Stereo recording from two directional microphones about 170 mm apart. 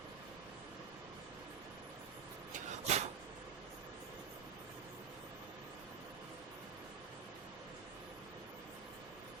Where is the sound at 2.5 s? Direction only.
45° right (ahead or behind).